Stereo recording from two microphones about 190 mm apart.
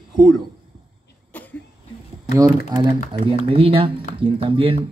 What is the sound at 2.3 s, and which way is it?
Speech, 20° right (ahead or behind).